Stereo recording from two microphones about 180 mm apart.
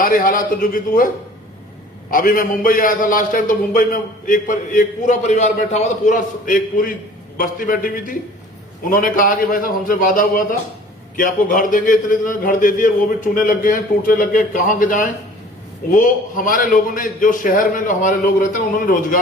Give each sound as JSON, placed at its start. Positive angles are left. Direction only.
{"t": 0.0, "sound": "a man's voice", "side_deg": 50}